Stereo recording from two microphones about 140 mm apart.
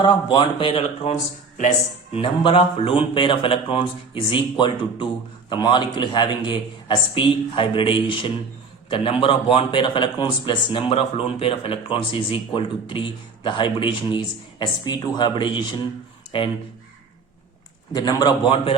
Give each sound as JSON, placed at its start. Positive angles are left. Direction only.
{"t": 0.0, "sound": "a man's voice", "side_deg": 35}
{"t": 2.1, "sound": "a man's voice", "side_deg": 40}
{"t": 17.9, "sound": "a man's voice", "side_deg": 30}